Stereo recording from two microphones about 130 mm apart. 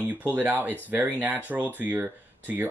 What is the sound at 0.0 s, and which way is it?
Speech, 15° right (ahead or behind).